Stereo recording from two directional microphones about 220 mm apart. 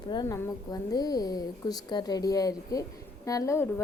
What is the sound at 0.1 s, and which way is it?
A woman's voice, 15° left (ahead or behind).